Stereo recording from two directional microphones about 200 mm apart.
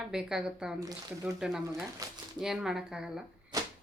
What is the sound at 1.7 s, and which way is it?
Speech, 15° right (ahead or behind).